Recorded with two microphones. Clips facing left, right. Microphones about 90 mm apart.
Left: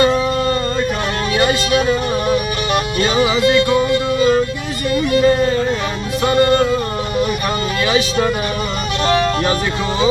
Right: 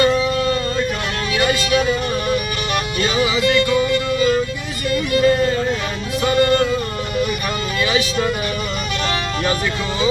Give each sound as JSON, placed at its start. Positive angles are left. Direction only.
{"t": 0.0, "sound": "music", "side_deg": 40}
{"t": 4.9, "sound": "speech", "side_deg": 35}
{"t": 7.8, "sound": "speech", "side_deg": 35}